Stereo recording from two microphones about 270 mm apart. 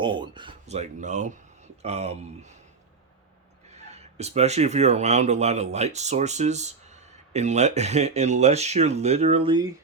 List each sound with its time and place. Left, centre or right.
0.0 s speech: centre
3.7 s speech: right